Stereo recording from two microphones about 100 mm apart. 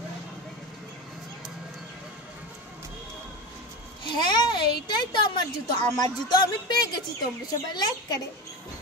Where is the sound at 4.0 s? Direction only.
50° left (ahead or behind).